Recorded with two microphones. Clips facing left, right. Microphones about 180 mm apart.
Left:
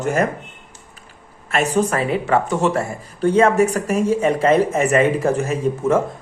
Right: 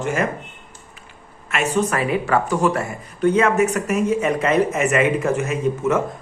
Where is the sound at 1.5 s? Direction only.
35° left (ahead or behind).